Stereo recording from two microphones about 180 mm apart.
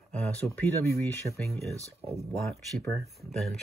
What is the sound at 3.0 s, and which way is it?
Speech, centre (ahead or behind).